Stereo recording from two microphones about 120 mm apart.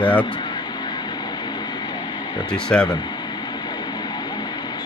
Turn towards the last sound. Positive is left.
turn(degrees=35)  # may be behind; listen again after turning